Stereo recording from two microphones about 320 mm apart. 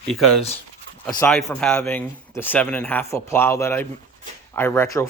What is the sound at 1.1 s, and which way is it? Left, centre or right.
Speech, centre.